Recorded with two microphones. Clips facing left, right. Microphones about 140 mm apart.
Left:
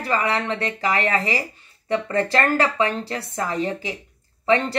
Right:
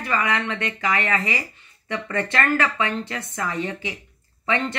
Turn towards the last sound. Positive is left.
turn(degrees=35)  # may be behind; listen again after turning